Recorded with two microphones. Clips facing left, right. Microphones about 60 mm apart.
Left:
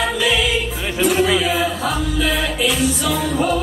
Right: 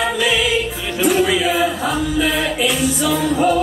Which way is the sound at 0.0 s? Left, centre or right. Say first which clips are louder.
Right 1 dB; centre.